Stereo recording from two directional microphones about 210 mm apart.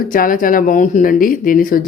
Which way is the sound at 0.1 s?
40° left (ahead or behind).